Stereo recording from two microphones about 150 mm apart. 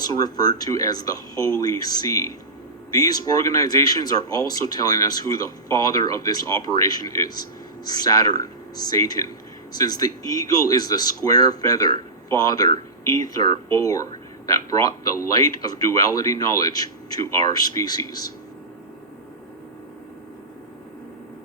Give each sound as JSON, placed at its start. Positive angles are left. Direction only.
{"t": 0.0, "sound": "speech", "side_deg": 25}